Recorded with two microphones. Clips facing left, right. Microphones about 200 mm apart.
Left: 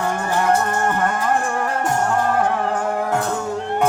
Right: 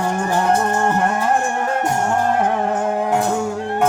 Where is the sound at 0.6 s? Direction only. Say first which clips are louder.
Right 2 dB; 30° right (ahead or behind).